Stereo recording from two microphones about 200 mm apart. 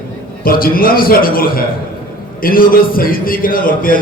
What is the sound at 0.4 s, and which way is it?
A man's voice, 45° left (ahead or behind).